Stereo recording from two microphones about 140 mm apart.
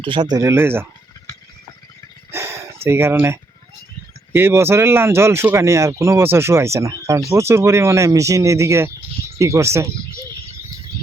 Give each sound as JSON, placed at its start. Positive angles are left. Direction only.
{"t": 0.0, "sound": "speech", "side_deg": -35}
{"t": 2.3, "sound": "a sound", "side_deg": -15}
{"t": 4.3, "sound": "speech", "side_deg": -15}